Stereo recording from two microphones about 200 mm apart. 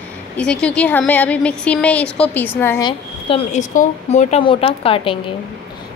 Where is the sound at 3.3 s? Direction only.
35° left (ahead or behind).